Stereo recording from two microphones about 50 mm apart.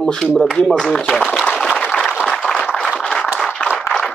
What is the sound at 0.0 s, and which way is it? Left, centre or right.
Speech, centre.